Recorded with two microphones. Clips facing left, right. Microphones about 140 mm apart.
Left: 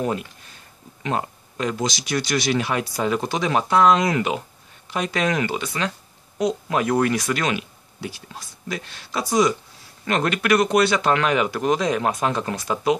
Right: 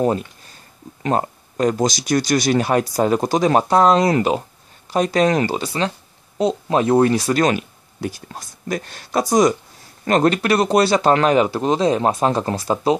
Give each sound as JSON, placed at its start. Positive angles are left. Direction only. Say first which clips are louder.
{"t": 1.0, "sound": "speech", "louder": "right 5 dB", "side_deg": -40}